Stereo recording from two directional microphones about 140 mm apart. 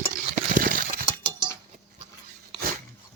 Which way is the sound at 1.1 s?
35° right (ahead or behind).